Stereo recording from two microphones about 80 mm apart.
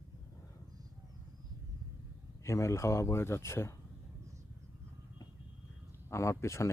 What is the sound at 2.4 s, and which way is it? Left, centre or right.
Speech, left.